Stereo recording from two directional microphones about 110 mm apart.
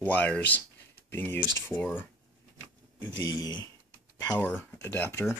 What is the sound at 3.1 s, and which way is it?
Speech, 35° left (ahead or behind).